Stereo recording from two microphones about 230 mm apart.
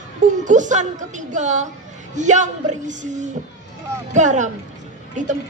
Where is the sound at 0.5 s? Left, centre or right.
Right.